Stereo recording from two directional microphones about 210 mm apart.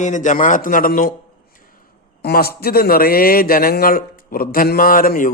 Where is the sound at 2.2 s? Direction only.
50° left (ahead or behind).